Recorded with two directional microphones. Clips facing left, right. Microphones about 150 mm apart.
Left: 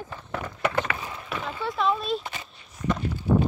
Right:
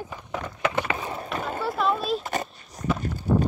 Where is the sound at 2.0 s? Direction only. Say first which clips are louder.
Right 2 dB; centre (ahead or behind).